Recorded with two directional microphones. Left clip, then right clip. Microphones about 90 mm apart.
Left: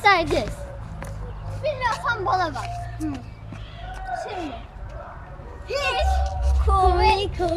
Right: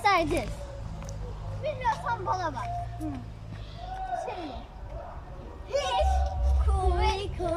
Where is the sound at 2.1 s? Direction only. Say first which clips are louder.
Left 7 dB; 20° right (ahead or behind).